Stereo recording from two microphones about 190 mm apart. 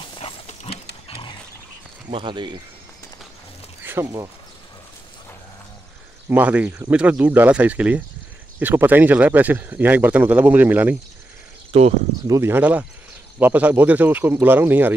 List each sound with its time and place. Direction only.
0.0 s pig: 30° left (ahead or behind)
2.0 s speech: 25° right (ahead or behind)
3.8 s speech: 15° right (ahead or behind)
6.2 s speech: 10° right (ahead or behind)
11.7 s speech: 30° right (ahead or behind)
12.3 s speech: 15° right (ahead or behind)